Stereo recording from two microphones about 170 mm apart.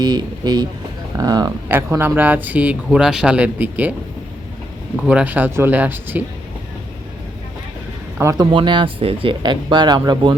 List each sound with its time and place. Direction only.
0.0 s speech: 25° right (ahead or behind); by 3.9 s 10° right (ahead or behind)
4.9 s speech: 5° right (ahead or behind)
8.2 s speech: 15° right (ahead or behind)
8.5 s speech: 30° right (ahead or behind)